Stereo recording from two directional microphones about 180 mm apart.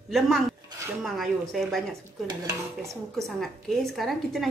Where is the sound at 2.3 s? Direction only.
20° right (ahead or behind).